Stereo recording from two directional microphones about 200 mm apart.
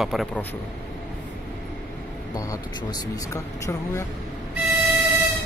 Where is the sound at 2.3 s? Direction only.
20° left (ahead or behind).